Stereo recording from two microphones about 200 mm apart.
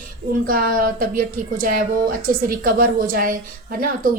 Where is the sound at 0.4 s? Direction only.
45° right (ahead or behind).